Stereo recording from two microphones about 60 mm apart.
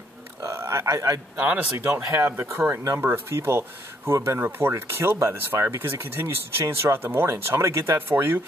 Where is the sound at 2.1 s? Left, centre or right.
Right.